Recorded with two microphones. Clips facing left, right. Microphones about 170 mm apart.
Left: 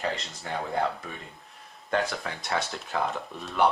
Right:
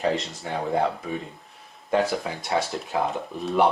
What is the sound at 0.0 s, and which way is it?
Speech, centre (ahead or behind).